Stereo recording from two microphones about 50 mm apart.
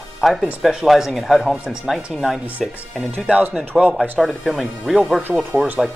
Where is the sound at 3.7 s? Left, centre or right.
Centre.